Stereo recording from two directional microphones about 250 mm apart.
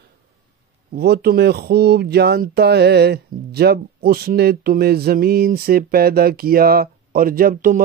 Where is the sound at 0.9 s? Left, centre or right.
Right.